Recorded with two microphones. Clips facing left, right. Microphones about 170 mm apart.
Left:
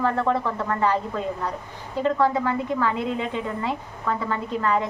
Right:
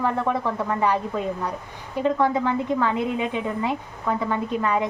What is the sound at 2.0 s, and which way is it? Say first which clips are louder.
A woman's voice: even; 15° right (ahead or behind).